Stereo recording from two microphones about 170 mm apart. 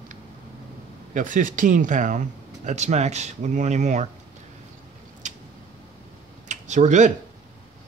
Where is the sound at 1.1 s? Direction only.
50° right (ahead or behind).